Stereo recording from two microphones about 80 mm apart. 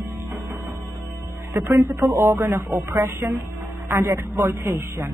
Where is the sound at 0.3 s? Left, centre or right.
Right.